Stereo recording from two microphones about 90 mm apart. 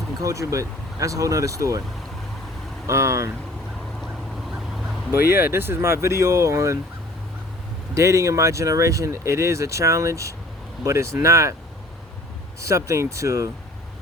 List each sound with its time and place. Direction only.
0.2 s speech: 35° right (ahead or behind)
2.8 s speech: 35° right (ahead or behind)
4.0 s vehicle: centre (ahead or behind)
5.2 s speech: 25° right (ahead or behind)
7.9 s speech: 35° right (ahead or behind)
12.6 s speech: 35° right (ahead or behind)